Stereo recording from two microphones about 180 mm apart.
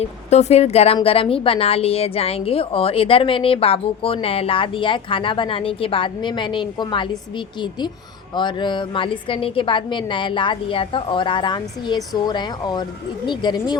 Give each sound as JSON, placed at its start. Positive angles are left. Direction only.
{"t": 0.0, "sound": "a woman's voice", "side_deg": 40}